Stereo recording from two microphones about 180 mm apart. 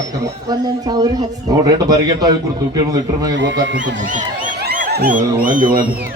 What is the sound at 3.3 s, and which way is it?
Speech, 90° right.